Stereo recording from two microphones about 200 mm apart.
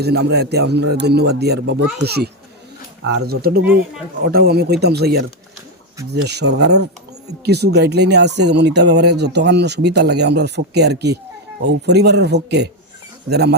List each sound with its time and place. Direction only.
0.0 s speech: 55° right (ahead or behind)
6.2 s speech: 55° right (ahead or behind)